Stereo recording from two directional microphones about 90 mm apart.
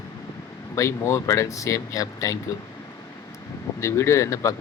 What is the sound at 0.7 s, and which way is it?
Speech, 35° left (ahead or behind).